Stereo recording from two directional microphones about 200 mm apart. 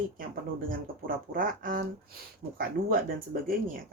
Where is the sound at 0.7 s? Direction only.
45° right (ahead or behind).